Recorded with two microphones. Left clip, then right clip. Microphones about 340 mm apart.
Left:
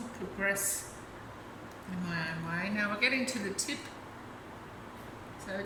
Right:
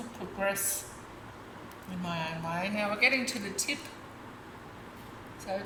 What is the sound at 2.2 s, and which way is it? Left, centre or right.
Speech, centre.